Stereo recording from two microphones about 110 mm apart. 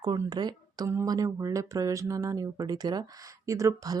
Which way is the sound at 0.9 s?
30° right (ahead or behind).